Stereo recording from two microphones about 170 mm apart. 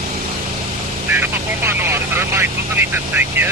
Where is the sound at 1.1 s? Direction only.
10° right (ahead or behind).